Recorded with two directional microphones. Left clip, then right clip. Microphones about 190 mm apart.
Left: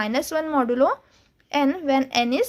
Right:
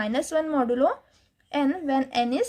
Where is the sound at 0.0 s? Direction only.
30° left (ahead or behind).